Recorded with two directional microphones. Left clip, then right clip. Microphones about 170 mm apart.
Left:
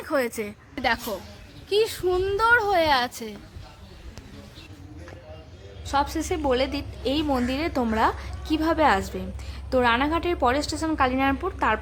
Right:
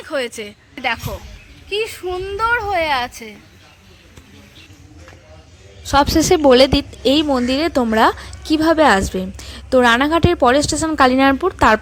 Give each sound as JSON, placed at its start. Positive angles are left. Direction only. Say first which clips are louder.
{"t": 0.0, "sound": "a woman's voice", "louder": "right 3 dB", "side_deg": -5}
{"t": 5.8, "sound": "a woman's voice", "louder": "right 11 dB", "side_deg": -35}